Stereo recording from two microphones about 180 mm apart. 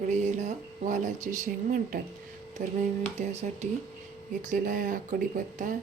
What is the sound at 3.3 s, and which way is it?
Speech, 35° right (ahead or behind).